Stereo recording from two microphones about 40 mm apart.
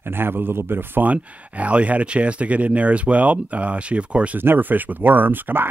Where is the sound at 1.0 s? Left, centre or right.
Right.